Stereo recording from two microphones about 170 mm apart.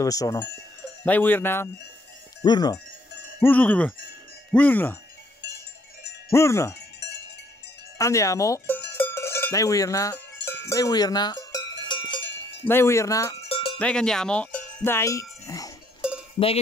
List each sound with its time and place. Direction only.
0.0 s cowbell: 20° left (ahead or behind)
1.0 s speech: 10° left (ahead or behind)
2.4 s cowbell: 25° left (ahead or behind)
3.3 s speech: 10° left (ahead or behind)
6.3 s speech: 15° left (ahead or behind)
7.0 s a sound: 90° left
8.0 s speech: 20° left (ahead or behind)
8.9 s cowbell: 15° left (ahead or behind)
12.6 s speech: 15° left (ahead or behind)
13.5 s cowbell: 30° left (ahead or behind)
13.7 s cowbell: 5° left (ahead or behind)